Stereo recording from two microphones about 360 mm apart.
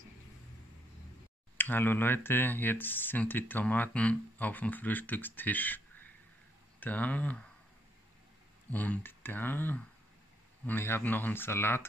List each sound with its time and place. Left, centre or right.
1.6 s speech: centre
8.7 s speech: centre